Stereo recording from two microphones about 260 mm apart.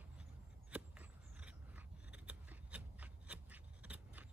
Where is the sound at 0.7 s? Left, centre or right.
Centre.